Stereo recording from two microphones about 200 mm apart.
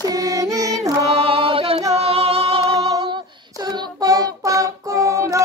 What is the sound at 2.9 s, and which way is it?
Child singing, 20° right (ahead or behind).